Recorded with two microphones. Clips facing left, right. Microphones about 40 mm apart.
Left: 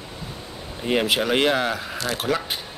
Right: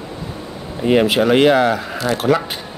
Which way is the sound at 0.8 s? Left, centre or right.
Centre.